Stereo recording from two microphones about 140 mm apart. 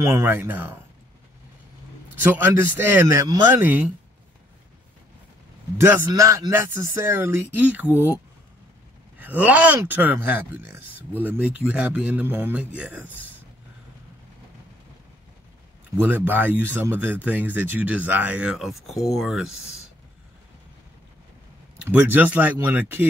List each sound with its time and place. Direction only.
0.0 s speech: 20° right (ahead or behind)
2.2 s speech: 15° right (ahead or behind)
5.8 s speech: 20° right (ahead or behind)
9.2 s speech: 10° right (ahead or behind)
16.0 s speech: 15° right (ahead or behind)
21.8 s speech: 15° right (ahead or behind)